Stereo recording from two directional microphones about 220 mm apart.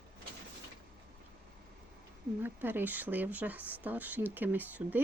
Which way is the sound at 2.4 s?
10° right (ahead or behind).